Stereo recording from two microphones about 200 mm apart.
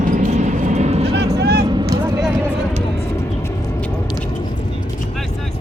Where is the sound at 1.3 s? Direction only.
55° right (ahead or behind).